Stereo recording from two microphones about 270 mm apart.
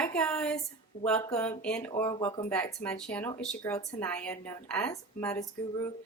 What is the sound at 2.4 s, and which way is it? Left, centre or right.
Speech, centre.